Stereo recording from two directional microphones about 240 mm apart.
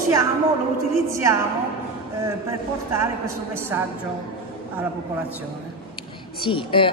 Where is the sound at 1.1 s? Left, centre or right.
Centre.